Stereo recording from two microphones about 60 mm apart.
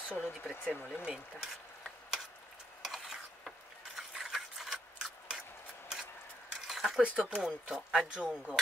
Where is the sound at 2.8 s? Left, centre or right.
Centre.